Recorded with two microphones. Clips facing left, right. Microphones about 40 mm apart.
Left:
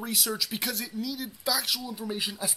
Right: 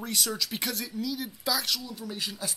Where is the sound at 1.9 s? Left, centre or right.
Left.